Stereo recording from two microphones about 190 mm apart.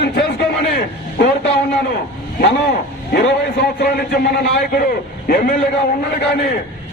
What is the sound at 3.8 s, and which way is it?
A man's voice, 45° left (ahead or behind).